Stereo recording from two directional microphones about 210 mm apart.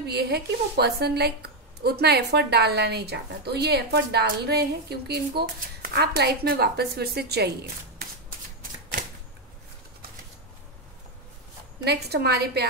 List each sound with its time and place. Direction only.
0.0 s a woman's voice: 50° right (ahead or behind)
11.8 s a woman's voice: 50° right (ahead or behind)